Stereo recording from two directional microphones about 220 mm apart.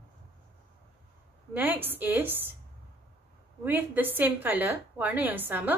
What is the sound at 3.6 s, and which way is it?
A woman's voice, 10° right (ahead or behind).